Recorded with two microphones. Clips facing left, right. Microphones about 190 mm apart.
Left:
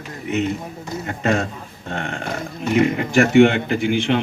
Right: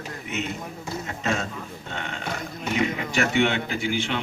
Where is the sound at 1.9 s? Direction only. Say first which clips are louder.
Left 8 dB; 50° left (ahead or behind).